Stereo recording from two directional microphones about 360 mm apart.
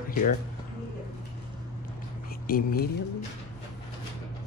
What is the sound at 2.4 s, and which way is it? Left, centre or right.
Speech, left.